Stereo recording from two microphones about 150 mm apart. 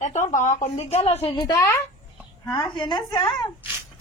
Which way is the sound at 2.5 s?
30° left (ahead or behind).